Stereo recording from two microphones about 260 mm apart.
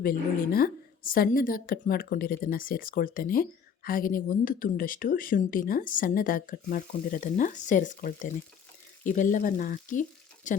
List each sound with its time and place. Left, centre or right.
0.0 s speech: left